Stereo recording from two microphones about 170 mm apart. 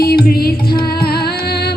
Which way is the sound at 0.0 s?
60° left (ahead or behind).